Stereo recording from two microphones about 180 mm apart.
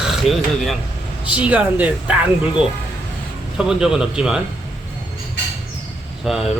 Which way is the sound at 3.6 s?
5° right (ahead or behind).